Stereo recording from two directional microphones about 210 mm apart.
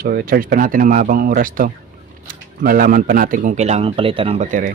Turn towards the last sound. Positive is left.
turn(degrees=-40)  # may be behind; listen again after turning